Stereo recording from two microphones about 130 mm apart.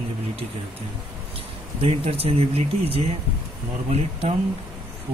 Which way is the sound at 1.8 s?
50° right (ahead or behind).